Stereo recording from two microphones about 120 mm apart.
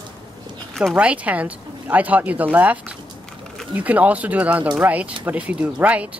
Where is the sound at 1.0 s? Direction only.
10° right (ahead or behind).